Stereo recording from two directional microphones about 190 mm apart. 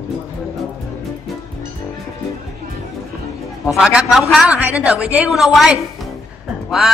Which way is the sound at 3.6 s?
5° right (ahead or behind).